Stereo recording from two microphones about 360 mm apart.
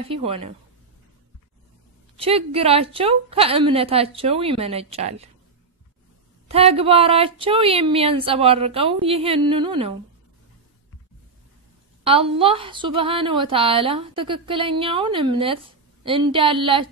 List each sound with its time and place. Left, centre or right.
0.1 s a woman's voice: centre
2.1 s a woman's voice: centre
6.5 s a woman's voice: centre
12.0 s a woman's voice: centre